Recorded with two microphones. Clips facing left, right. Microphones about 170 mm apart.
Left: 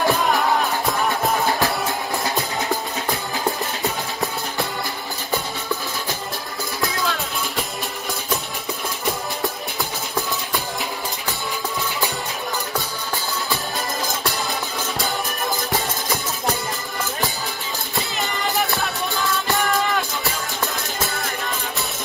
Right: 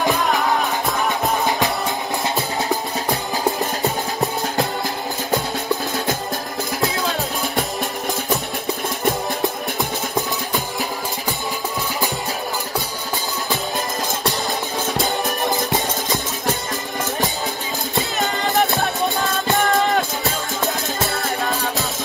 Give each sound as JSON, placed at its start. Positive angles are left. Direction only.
{"t": 0.1, "sound": "music", "side_deg": 0}
{"t": 6.8, "sound": "music", "side_deg": -35}
{"t": 19.6, "sound": "music", "side_deg": -40}